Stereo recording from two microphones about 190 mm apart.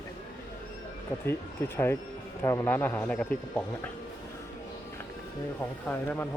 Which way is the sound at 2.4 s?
10° left (ahead or behind).